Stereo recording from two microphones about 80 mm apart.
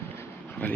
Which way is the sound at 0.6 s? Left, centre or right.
Left.